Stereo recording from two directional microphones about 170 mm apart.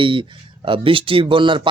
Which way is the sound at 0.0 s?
30° right (ahead or behind).